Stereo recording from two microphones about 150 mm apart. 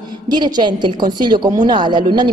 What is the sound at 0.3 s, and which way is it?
A woman's voice, 30° right (ahead or behind).